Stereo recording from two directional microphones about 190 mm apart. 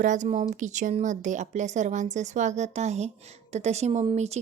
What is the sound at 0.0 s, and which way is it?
A woman's voice, 40° right (ahead or behind).